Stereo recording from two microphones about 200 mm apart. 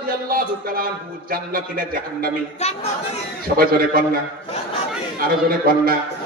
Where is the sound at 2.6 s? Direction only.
35° left (ahead or behind).